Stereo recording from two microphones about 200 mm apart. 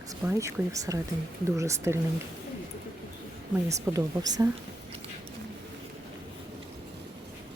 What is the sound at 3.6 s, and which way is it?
Speech, 15° right (ahead or behind).